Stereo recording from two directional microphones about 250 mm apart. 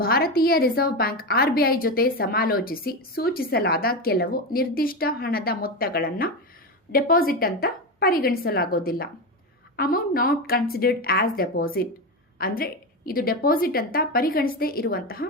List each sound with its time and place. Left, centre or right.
0.0 s a woman's voice: left